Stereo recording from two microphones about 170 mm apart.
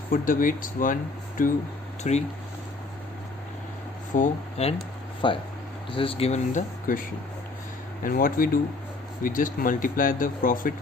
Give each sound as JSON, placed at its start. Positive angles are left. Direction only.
{"t": 0.1, "sound": "speech", "side_deg": 55}
{"t": 2.0, "sound": "speech", "side_deg": 45}
{"t": 4.1, "sound": "speech", "side_deg": 45}
{"t": 5.2, "sound": "speech", "side_deg": 30}
{"t": 8.0, "sound": "speech", "side_deg": 55}